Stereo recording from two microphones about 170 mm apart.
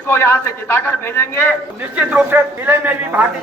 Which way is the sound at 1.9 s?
5° right (ahead or behind).